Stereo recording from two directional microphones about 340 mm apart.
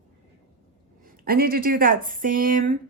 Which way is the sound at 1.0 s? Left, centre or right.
Right.